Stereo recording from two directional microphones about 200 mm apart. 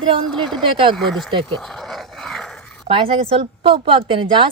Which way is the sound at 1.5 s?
Centre (ahead or behind).